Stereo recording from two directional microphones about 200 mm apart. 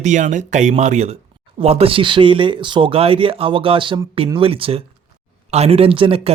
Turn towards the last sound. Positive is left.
turn(degrees=-30)  # may be behind; listen again after turning